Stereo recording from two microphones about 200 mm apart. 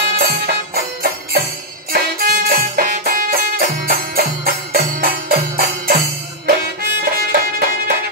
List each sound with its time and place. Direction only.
0.1 s music: 50° right (ahead or behind)